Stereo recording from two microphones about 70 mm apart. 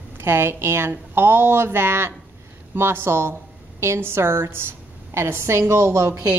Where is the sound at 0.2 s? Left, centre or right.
Right.